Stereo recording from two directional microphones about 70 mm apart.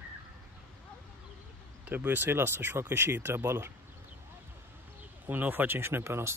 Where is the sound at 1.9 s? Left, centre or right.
Right.